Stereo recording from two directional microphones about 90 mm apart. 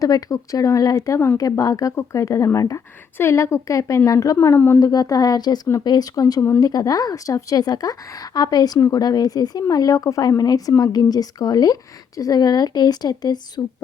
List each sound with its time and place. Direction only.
0.0 s speech: 40° left (ahead or behind)
4.4 s speech: 30° left (ahead or behind)
4.8 s speech: 45° left (ahead or behind)